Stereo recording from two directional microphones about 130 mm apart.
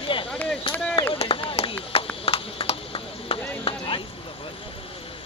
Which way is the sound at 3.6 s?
40° left (ahead or behind).